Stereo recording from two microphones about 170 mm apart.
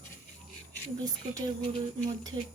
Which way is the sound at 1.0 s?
20° right (ahead or behind).